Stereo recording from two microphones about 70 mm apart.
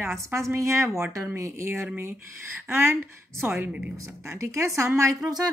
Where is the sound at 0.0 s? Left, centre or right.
Right.